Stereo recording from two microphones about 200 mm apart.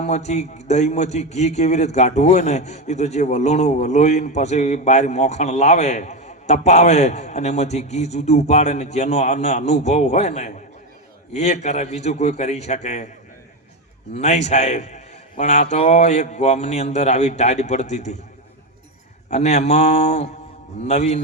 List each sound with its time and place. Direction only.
0.0 s a man's voice: 35° left (ahead or behind)
14.2 s a man's voice: 35° left (ahead or behind)
19.3 s a man's voice: 35° left (ahead or behind)